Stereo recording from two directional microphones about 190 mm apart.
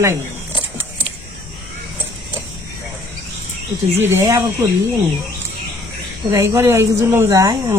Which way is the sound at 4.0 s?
15° right (ahead or behind).